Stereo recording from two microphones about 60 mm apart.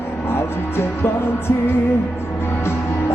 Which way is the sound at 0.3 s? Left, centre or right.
Left.